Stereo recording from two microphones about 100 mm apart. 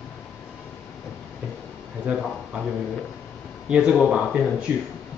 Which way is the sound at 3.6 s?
10° right (ahead or behind).